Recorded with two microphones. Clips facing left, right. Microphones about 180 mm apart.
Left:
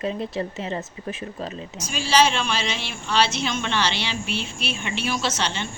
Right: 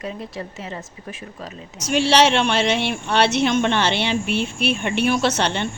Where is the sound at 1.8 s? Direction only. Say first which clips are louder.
Right 4 dB; 70° right (ahead or behind).